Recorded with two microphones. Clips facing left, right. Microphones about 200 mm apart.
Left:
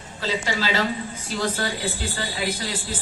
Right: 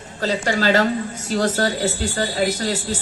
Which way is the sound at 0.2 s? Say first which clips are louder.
Right 5 dB; 50° right (ahead or behind).